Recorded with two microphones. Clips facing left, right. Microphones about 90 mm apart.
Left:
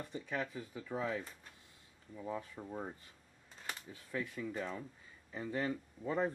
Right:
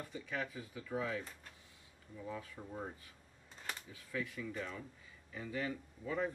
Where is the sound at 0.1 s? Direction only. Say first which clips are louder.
Left 2 dB; 35° left (ahead or behind).